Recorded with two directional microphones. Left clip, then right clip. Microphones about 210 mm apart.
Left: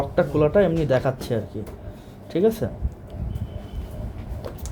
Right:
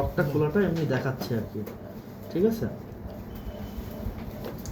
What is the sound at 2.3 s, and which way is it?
Speech, 40° left (ahead or behind).